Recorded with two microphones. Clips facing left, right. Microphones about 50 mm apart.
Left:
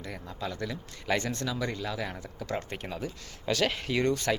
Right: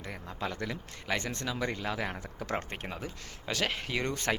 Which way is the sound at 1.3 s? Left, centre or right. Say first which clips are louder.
Left 1 dB; right.